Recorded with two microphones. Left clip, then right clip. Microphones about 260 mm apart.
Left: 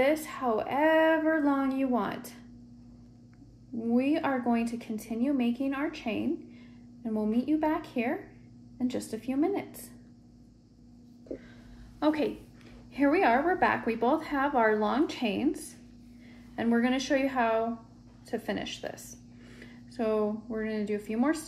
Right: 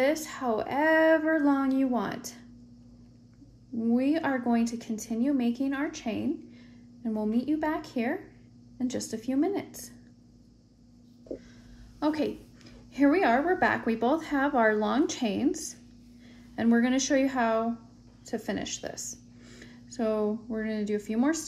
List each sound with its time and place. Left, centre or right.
0.0 s a woman's voice: right
3.7 s a woman's voice: right
12.0 s a woman's voice: right